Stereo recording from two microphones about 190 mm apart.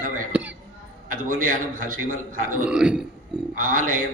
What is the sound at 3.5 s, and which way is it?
Speech, 45° right (ahead or behind).